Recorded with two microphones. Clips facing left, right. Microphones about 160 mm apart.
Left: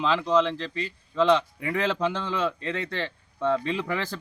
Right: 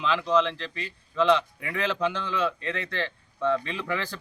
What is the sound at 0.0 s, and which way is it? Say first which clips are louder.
Speech: left 1 dB; 35° left (ahead or behind).